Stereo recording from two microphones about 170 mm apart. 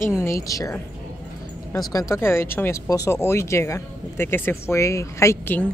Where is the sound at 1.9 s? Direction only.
15° left (ahead or behind).